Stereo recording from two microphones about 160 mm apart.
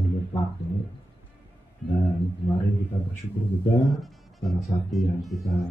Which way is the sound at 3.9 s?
Centre (ahead or behind).